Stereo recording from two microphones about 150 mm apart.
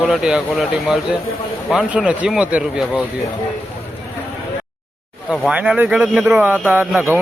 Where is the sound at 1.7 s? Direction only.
5° right (ahead or behind).